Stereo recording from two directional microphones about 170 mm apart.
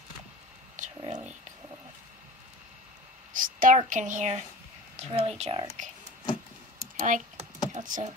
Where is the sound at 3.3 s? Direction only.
55° right (ahead or behind); by 5.6 s 35° right (ahead or behind).